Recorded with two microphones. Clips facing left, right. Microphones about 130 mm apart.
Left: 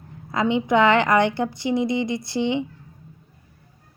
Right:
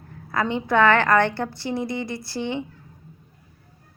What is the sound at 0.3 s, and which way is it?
A woman's voice, 20° left (ahead or behind).